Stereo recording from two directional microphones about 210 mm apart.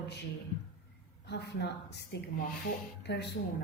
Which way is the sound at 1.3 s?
55° left (ahead or behind).